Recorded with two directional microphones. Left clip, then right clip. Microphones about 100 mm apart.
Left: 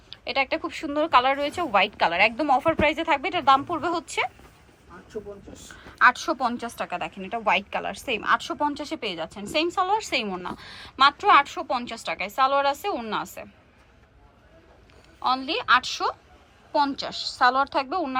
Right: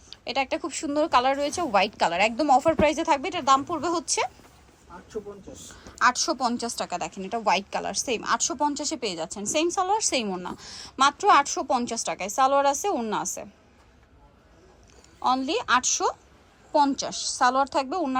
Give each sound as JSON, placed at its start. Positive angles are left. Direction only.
{"t": 0.1, "sound": "a woman's voice", "side_deg": -35}
{"t": 5.6, "sound": "a woman's voice", "side_deg": -35}
{"t": 15.2, "sound": "a woman's voice", "side_deg": -40}